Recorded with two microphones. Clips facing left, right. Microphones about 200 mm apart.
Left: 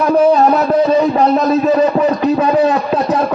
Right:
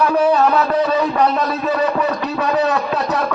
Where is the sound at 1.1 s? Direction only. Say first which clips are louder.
Left 5 dB; 35° left (ahead or behind).